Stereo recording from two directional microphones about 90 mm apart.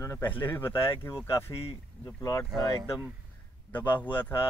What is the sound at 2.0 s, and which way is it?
Speech, 40° left (ahead or behind).